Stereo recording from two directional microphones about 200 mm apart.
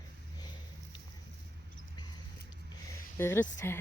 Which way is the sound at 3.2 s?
10° left (ahead or behind).